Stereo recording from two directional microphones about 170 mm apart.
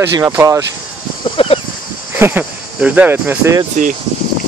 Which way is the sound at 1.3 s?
35° left (ahead or behind).